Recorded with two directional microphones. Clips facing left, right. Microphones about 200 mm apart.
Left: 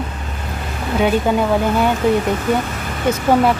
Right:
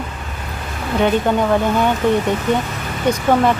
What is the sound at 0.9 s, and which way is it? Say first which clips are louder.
Speech: even; 5° left (ahead or behind).